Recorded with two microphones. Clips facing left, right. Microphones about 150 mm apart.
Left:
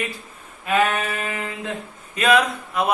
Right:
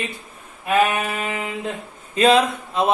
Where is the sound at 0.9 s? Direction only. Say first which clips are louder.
Right 1 dB; 15° right (ahead or behind).